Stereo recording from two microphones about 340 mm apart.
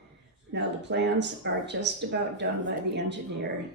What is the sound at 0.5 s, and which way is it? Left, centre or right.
Speech, right.